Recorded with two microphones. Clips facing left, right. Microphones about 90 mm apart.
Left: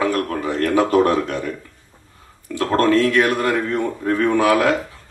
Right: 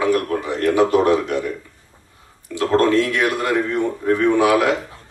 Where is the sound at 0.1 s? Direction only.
20° right (ahead or behind).